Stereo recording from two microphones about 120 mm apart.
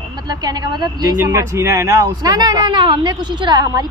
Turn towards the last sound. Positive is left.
turn(degrees=-35)  # may be behind; listen again after turning